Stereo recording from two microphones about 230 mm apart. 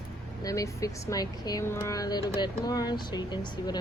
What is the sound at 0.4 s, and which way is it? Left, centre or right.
Speech, centre.